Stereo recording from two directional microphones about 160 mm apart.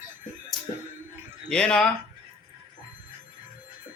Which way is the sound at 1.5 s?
5° left (ahead or behind).